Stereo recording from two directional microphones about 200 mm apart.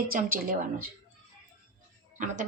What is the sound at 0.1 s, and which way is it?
Speech, 45° right (ahead or behind).